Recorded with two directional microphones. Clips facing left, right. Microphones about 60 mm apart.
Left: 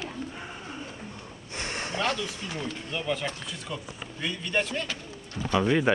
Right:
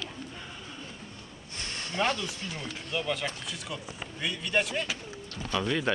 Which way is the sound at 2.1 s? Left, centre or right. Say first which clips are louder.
Left 1 dB; left.